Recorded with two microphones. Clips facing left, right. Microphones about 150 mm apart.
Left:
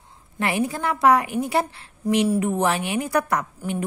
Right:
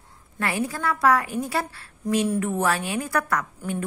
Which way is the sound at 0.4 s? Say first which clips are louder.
Left 3 dB; 20° left (ahead or behind).